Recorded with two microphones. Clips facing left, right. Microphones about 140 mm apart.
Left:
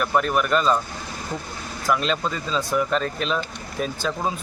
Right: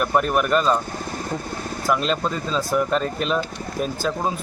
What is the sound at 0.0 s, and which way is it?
Speech, 5° right (ahead or behind).